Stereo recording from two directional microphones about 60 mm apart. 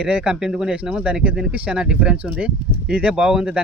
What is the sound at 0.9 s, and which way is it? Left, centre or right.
Speech, right.